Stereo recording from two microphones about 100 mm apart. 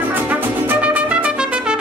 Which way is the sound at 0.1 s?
20° right (ahead or behind).